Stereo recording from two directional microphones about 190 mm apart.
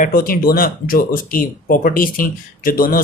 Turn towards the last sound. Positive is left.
turn(degrees=50)  # may be behind; listen again after turning